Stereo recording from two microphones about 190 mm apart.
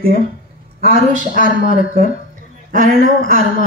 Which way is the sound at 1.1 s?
45° right (ahead or behind).